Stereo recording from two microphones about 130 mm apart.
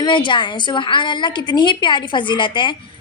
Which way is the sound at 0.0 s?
35° left (ahead or behind).